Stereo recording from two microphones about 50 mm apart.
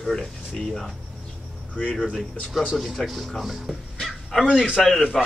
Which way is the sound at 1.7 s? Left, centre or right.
Left.